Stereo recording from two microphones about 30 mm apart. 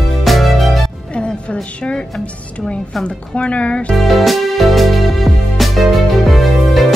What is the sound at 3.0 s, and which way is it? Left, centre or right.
Speech, left.